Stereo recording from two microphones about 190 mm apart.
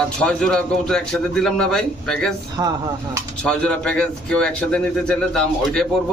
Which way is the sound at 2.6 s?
15° right (ahead or behind).